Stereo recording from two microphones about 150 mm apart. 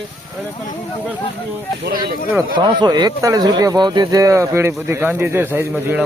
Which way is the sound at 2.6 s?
30° right (ahead or behind).